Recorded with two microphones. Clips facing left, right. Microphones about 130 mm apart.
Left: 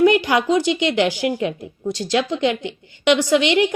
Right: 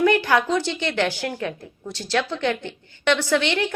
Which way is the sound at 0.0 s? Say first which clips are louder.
Left 3 dB; 15° left (ahead or behind).